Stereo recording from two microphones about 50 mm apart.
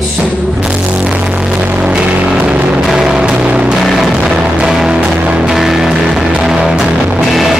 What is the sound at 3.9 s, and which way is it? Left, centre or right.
Music, centre.